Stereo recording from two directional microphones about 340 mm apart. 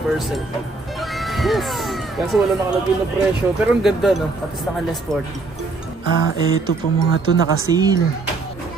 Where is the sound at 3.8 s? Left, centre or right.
Centre.